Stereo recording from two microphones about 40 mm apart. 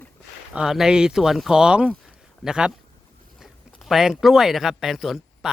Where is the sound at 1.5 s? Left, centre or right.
Right.